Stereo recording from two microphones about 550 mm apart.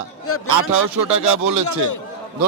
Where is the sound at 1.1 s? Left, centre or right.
Right.